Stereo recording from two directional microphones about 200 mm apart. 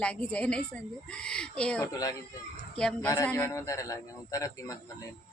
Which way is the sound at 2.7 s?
5° left (ahead or behind).